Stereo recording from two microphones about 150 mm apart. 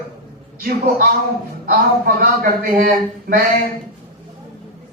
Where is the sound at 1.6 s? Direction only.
90° right; by 3.4 s 70° right (ahead or behind).